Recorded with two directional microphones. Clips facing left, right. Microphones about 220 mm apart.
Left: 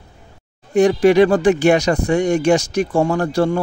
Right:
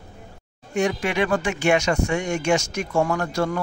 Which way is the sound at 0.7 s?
35° left (ahead or behind).